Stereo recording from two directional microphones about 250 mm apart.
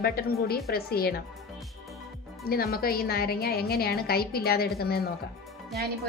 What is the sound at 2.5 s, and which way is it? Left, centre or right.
A woman's voice, left.